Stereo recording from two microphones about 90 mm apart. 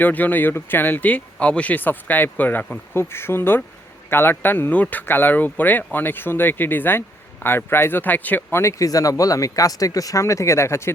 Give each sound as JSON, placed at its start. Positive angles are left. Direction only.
{"t": 0.0, "sound": "speech", "side_deg": 20}